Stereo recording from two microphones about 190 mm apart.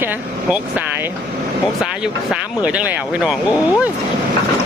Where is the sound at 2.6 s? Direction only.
5° right (ahead or behind).